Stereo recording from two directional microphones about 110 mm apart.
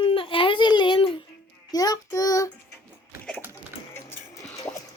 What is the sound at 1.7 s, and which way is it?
Child singing, 35° left (ahead or behind).